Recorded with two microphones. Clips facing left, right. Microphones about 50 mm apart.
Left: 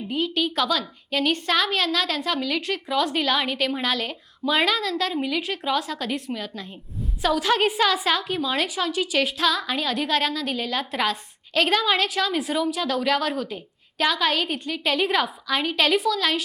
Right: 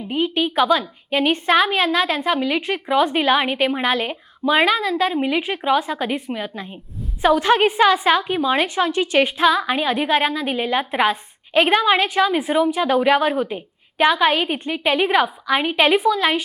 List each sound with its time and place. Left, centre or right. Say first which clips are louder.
0.1 s a woman's voice: right 4 dB; right